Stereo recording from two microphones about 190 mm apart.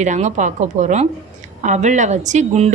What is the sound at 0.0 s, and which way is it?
A woman's voice, 40° right (ahead or behind).